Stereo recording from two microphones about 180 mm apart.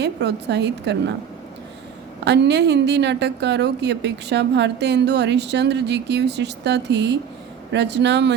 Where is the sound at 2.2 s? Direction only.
75° right (ahead or behind).